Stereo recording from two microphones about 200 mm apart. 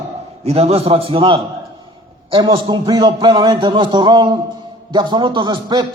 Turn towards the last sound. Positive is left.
turn(degrees=-20)  # may be behind; listen again after turning